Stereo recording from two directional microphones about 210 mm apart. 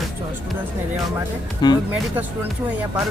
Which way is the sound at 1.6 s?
20° left (ahead or behind).